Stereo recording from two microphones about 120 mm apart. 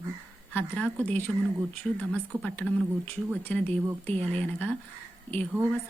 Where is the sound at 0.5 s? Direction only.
10° left (ahead or behind).